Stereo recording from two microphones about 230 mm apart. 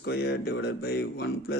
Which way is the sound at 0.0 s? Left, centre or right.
Left.